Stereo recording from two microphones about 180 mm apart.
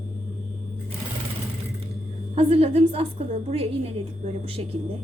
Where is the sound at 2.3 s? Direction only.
30° right (ahead or behind).